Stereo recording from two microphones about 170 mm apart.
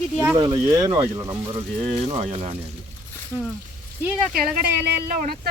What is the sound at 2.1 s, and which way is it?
Speech, 40° right (ahead or behind).